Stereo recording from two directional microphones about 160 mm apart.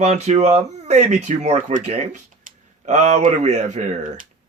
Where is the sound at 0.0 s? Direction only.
45° right (ahead or behind).